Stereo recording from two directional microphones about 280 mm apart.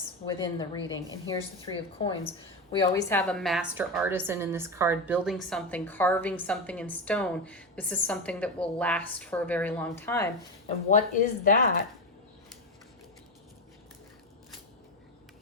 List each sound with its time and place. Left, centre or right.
0.3 s a woman's voice: centre
10.8 s speech: left